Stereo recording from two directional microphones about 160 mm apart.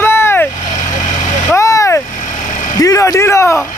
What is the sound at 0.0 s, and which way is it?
Vehicle, 15° left (ahead or behind).